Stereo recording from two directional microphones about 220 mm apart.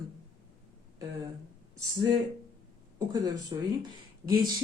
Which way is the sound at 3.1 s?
15° right (ahead or behind).